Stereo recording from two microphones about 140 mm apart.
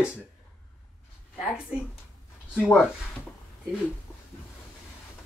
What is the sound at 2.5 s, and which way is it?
Speech, centre (ahead or behind).